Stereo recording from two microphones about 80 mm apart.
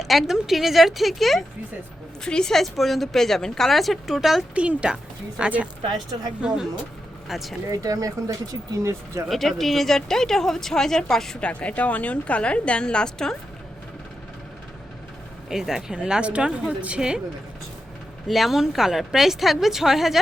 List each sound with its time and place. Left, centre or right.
0.0 s speech: centre
4.5 s speech: centre
7.3 s speech: centre
7.7 s speech: right
9.3 s speech: centre
15.4 s speech: centre
18.3 s speech: centre